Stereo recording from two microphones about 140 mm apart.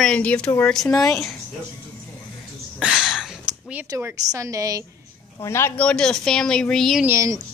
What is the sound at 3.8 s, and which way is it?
A woman's voice, 20° right (ahead or behind).